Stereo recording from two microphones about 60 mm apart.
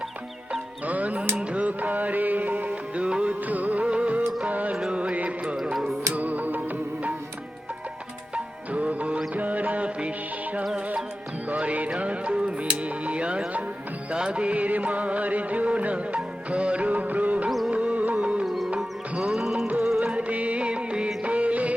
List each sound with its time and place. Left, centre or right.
0.9 s music: right
5.6 s music: centre
6.1 s music: right
8.7 s music: right
11.4 s music: right
18.4 s music: centre
19.6 s music: right
19.9 s music: centre